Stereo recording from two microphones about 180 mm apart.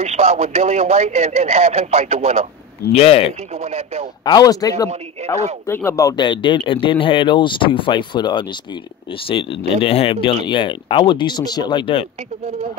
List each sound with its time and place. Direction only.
0.0 s speech: 35° right (ahead or behind)
2.9 s a man's voice: 35° left (ahead or behind)
3.5 s speech: 35° right (ahead or behind)
4.2 s speech: 20° left (ahead or behind)